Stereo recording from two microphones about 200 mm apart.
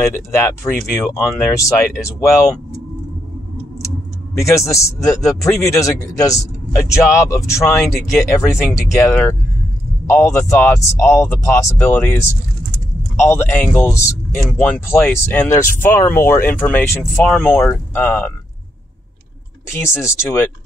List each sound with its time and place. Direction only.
0.1 s speech: 15° left (ahead or behind)
4.4 s speech: 15° left (ahead or behind)
19.9 s speech: 10° left (ahead or behind)